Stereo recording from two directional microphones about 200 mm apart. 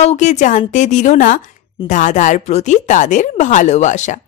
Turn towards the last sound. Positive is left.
turn(degrees=35)  # may be behind; listen again after turning